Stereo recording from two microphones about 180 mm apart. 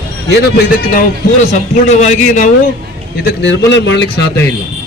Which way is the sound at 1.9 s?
40° left (ahead or behind).